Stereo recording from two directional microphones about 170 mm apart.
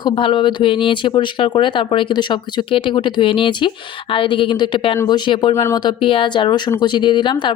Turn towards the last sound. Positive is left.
turn(degrees=30)  # may be behind; listen again after turning